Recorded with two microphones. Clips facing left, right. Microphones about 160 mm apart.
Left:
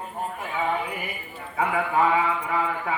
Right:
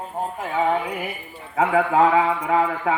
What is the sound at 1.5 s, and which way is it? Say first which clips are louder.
A man's voice: right 5 dB; 75° right (ahead or behind).